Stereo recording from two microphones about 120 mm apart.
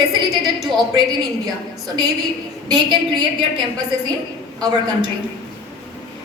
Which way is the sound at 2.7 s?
35° right (ahead or behind).